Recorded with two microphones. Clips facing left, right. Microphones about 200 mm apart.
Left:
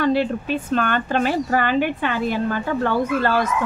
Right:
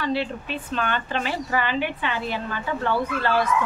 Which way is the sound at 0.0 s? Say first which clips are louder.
Left 7 dB; 50° left (ahead or behind).